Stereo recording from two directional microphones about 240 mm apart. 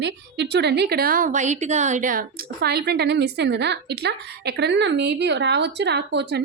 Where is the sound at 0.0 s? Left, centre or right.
Right.